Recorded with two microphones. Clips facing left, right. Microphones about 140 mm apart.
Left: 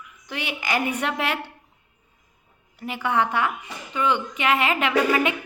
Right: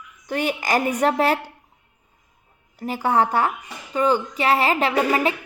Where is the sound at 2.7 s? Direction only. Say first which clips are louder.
Right 4 dB; 40° right (ahead or behind).